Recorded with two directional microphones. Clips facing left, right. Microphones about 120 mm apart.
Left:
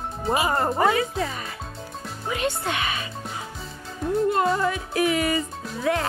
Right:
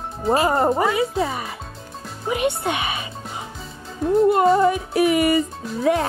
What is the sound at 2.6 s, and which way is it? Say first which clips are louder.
Speech: right 3 dB; 15° right (ahead or behind).